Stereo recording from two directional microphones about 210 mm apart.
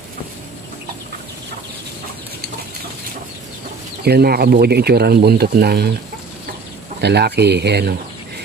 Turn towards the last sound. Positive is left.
turn(degrees=-50)  # may be behind; listen again after turning